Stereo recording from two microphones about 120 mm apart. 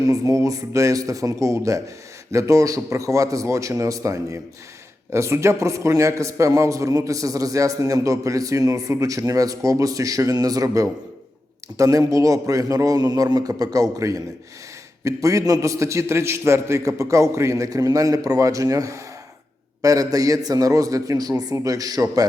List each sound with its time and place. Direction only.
0.0 s a man's voice: 30° right (ahead or behind)